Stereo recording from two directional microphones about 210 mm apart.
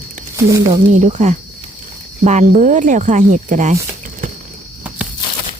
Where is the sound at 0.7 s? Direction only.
35° right (ahead or behind).